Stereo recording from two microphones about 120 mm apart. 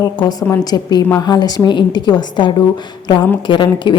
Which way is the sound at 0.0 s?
35° left (ahead or behind).